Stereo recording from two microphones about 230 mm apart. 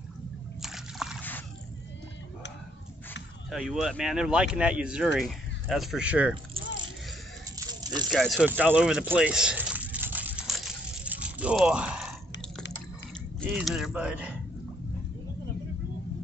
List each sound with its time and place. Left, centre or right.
0.6 s slosh: centre
3.4 s speech: centre
7.5 s snake: centre
8.1 s a sound: centre
13.4 s speech: centre